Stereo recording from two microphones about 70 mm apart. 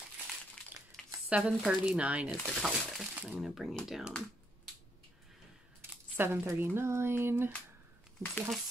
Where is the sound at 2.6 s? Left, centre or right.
Centre.